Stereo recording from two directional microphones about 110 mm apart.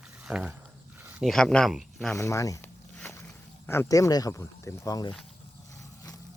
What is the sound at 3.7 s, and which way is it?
Speech, 25° left (ahead or behind).